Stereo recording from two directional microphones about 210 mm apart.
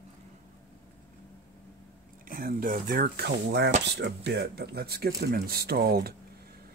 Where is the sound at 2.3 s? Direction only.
45° right (ahead or behind).